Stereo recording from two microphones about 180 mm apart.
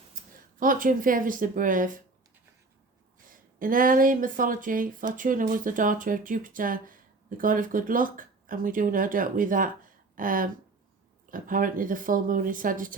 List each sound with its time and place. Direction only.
0.6 s speech: 50° right (ahead or behind)
3.2 s speech: 50° right (ahead or behind)